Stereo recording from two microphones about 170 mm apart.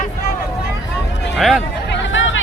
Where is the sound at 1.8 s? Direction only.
90° left.